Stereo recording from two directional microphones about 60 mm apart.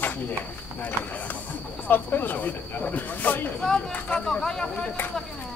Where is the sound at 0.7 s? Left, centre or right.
Left.